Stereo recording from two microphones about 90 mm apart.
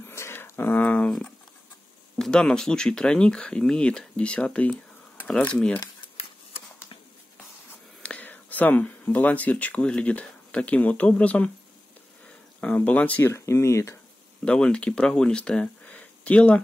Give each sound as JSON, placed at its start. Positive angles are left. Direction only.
{"t": 0.0, "sound": "a sound", "side_deg": 30}
{"t": 2.1, "sound": "speech", "side_deg": 5}
{"t": 6.1, "sound": "a sound", "side_deg": 90}
{"t": 8.0, "sound": "speech", "side_deg": 15}
{"t": 12.5, "sound": "speech", "side_deg": 15}
{"t": 13.3, "sound": "speech", "side_deg": 30}
{"t": 14.4, "sound": "speech", "side_deg": 10}